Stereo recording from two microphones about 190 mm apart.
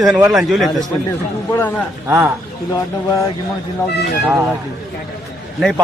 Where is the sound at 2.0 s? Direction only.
10° right (ahead or behind).